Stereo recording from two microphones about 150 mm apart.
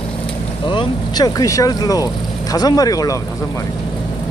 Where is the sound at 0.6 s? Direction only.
30° left (ahead or behind).